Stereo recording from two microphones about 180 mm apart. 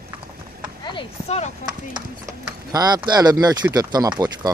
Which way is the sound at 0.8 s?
30° left (ahead or behind).